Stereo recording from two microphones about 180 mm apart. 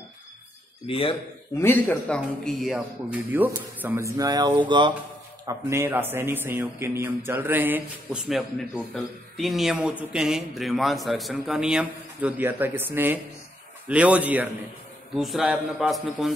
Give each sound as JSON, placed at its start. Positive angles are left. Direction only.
{"t": 0.8, "sound": "a man's voice", "side_deg": 30}
{"t": 1.6, "sound": "a man's voice", "side_deg": 10}
{"t": 5.5, "sound": "a man's voice", "side_deg": -15}